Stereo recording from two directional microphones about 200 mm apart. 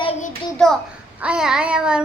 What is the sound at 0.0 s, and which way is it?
Child singing, 30° left (ahead or behind).